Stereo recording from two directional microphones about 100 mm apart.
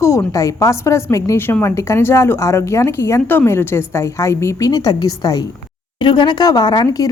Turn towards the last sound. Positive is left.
turn(degrees=40)  # may be behind; listen again after turning